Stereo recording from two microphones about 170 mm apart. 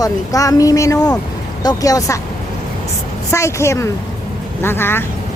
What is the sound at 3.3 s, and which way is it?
Speech, 15° left (ahead or behind).